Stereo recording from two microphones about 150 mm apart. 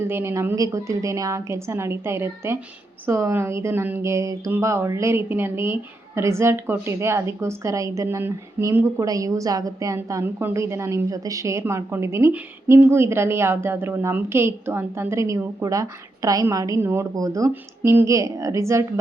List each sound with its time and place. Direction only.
0.0 s a woman's voice: 15° right (ahead or behind)